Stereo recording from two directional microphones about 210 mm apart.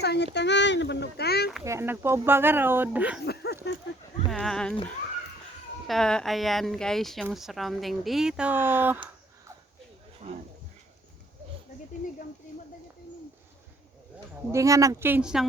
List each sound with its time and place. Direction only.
0.0 s speech: 50° left (ahead or behind)
1.6 s speech: 10° right (ahead or behind)
3.2 s a sound: 50° left (ahead or behind)
4.3 s speech: centre (ahead or behind)
5.9 s speech: 5° left (ahead or behind)
14.5 s speech: 15° right (ahead or behind)